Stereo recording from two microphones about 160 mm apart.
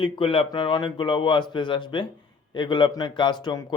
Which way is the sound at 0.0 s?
35° left (ahead or behind).